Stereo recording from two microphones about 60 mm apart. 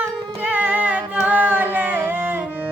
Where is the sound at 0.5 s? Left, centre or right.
Right.